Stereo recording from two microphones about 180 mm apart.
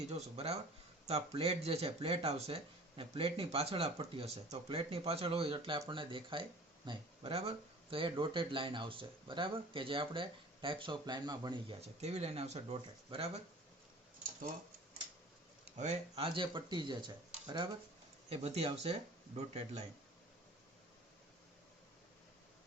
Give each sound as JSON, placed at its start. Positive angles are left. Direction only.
{"t": 0.1, "sound": "speech", "side_deg": -35}
{"t": 11.8, "sound": "speech", "side_deg": -35}
{"t": 15.8, "sound": "speech", "side_deg": -35}